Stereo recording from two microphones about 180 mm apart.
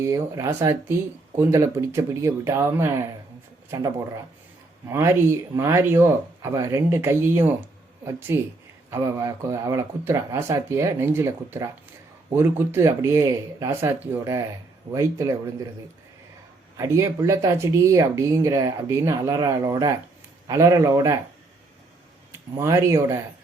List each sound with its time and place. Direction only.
0.0 s speech: 15° right (ahead or behind)
4.9 s speech: 15° right (ahead or behind)
16.7 s speech: 15° right (ahead or behind)
22.3 s speech: 15° right (ahead or behind)